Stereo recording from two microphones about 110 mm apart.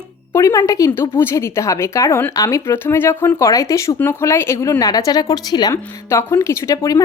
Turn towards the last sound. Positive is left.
turn(degrees=30)  # may be behind; listen again after turning